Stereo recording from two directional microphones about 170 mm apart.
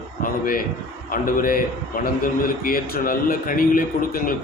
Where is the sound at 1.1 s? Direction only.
55° left (ahead or behind).